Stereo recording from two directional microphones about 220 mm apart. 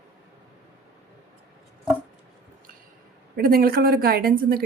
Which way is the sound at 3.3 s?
40° right (ahead or behind).